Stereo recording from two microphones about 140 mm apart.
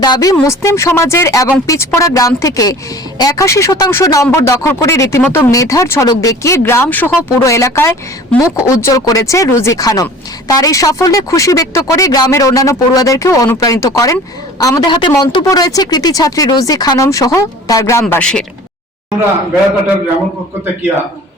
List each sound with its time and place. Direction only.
0.0 s speech: 25° left (ahead or behind)
18.1 s speech: 5° left (ahead or behind)